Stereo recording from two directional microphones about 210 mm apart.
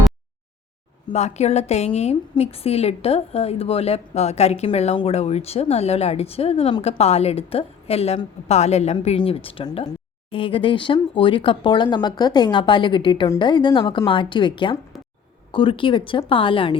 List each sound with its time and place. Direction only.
1.1 s a woman's voice: 30° left (ahead or behind)